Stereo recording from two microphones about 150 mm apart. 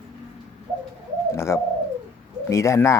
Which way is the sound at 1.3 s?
20° left (ahead or behind).